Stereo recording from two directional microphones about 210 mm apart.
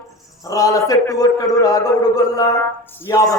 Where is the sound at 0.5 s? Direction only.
15° left (ahead or behind).